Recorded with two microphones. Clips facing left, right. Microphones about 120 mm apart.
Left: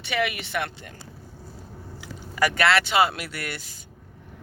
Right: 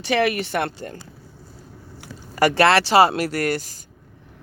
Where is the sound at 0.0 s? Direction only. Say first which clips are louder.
Right 7 dB; 40° right (ahead or behind).